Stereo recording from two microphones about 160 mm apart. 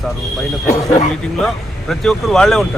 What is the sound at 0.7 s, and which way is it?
Speech, 20° left (ahead or behind).